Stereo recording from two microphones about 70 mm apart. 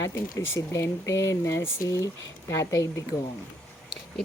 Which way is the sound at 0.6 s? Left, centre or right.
Left.